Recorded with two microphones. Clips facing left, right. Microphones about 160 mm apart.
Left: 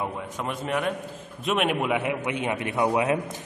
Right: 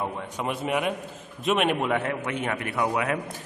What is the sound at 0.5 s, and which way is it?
A man's voice, 10° right (ahead or behind).